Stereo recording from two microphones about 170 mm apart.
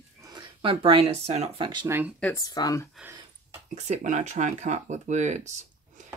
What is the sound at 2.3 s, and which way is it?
Speech, 20° left (ahead or behind).